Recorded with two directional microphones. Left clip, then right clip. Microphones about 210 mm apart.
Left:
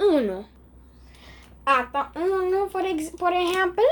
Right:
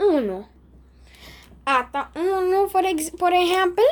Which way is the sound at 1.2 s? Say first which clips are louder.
Even; 50° right (ahead or behind).